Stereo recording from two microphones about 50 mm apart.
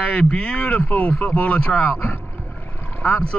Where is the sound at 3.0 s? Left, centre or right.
Left.